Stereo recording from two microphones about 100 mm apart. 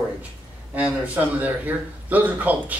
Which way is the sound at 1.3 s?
15° right (ahead or behind).